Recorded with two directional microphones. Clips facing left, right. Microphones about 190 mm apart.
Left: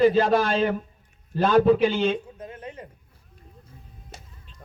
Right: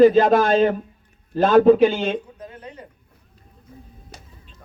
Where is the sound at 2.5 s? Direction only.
35° right (ahead or behind).